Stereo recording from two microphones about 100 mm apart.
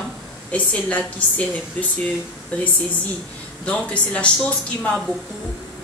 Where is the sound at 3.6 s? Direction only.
10° left (ahead or behind).